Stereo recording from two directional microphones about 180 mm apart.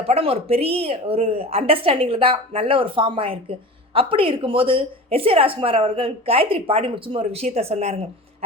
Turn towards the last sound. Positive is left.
turn(degrees=-35)  # may be behind; listen again after turning